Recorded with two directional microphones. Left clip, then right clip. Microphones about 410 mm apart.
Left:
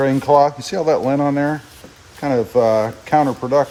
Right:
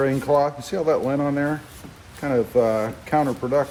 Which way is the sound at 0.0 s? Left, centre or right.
Left.